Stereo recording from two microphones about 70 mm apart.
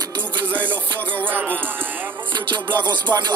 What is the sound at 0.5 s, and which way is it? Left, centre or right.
Music, right.